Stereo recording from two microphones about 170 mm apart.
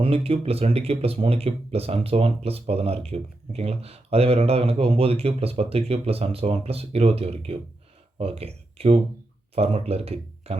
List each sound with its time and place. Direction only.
0.0 s speech: 35° right (ahead or behind)